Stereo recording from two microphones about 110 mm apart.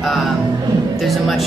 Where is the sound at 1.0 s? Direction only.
Centre (ahead or behind).